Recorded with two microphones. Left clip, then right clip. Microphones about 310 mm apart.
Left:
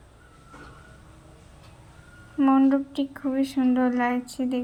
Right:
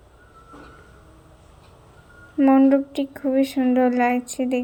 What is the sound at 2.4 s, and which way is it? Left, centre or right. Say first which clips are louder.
A woman's voice: right 4 dB; right.